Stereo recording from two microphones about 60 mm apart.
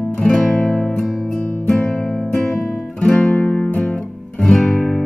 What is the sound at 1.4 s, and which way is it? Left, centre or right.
Guitar, left.